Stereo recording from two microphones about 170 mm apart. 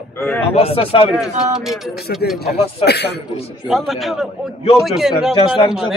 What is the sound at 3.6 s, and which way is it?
Speech, centre (ahead or behind).